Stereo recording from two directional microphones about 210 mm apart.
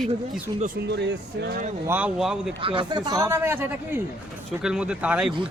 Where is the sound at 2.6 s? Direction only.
25° right (ahead or behind).